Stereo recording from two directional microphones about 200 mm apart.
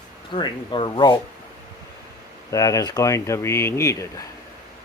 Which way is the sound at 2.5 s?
15° left (ahead or behind).